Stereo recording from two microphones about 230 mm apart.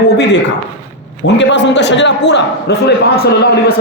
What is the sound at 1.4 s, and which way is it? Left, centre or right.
A man's voice, left.